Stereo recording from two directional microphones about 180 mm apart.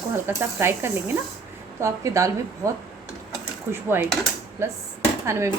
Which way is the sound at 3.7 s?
15° right (ahead or behind).